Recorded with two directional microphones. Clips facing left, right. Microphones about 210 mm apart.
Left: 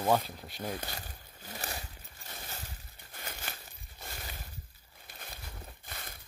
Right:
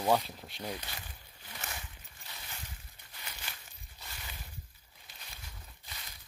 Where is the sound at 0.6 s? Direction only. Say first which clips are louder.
Left 3 dB; 50° left (ahead or behind).